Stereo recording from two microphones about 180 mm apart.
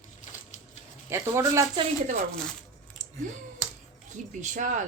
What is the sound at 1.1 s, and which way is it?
Speech, 15° right (ahead or behind).